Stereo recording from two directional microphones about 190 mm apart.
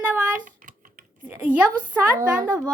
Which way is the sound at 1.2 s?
10° right (ahead or behind).